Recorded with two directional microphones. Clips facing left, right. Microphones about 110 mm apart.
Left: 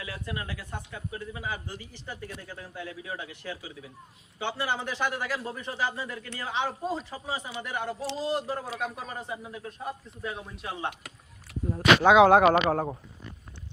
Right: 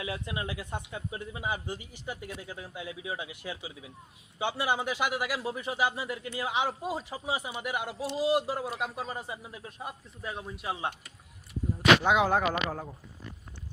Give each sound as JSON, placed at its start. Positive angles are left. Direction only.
{"t": 0.0, "sound": "a man's voice", "side_deg": -20}
{"t": 11.7, "sound": "speech", "side_deg": 85}